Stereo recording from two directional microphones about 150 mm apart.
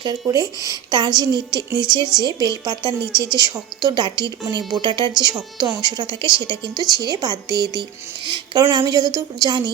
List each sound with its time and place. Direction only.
0.0 s a woman's voice: 25° right (ahead or behind)